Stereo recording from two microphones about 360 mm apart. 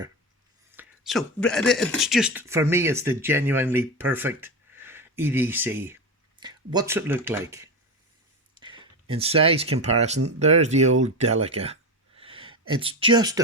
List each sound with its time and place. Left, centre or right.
0.8 s speech: centre